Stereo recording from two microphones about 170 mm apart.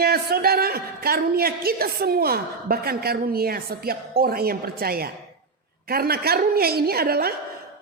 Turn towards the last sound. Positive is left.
turn(degrees=-65)  # may be behind; listen again after turning